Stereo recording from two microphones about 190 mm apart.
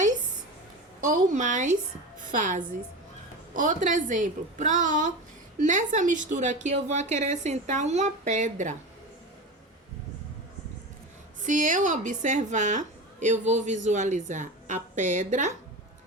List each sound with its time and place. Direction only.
1.0 s a woman's voice: 40° right (ahead or behind)
11.4 s a woman's voice: 40° right (ahead or behind)